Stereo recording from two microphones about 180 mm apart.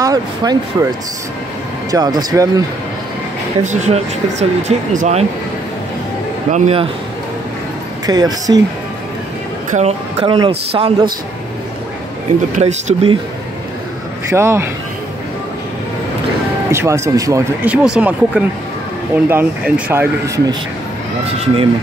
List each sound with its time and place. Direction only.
0.0 s speech: 20° right (ahead or behind)
1.9 s speech: 20° right (ahead or behind)
3.6 s speech: 40° right (ahead or behind)
6.5 s speech: 35° right (ahead or behind)
8.1 s speech: 20° right (ahead or behind)
9.7 s speech: 40° right (ahead or behind)
10.2 s speech: 25° right (ahead or behind)
12.5 s speech: 40° right (ahead or behind)
14.3 s speech: 15° right (ahead or behind)
16.7 s speech: 15° right (ahead or behind)